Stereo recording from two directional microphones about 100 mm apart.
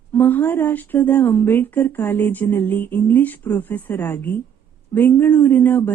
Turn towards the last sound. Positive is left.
turn(degrees=20)  # may be behind; listen again after turning